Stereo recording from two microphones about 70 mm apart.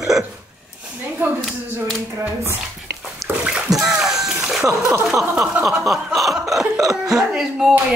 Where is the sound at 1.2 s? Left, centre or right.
Right.